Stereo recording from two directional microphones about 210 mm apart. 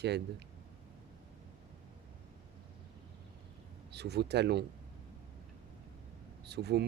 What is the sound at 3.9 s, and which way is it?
Speech, 50° right (ahead or behind).